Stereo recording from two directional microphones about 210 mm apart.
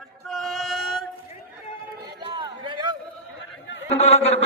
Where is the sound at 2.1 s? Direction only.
20° right (ahead or behind).